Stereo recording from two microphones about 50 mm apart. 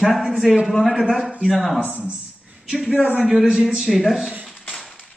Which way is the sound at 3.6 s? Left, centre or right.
Centre.